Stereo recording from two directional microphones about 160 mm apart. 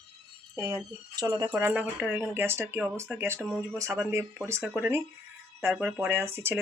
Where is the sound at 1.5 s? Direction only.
15° right (ahead or behind).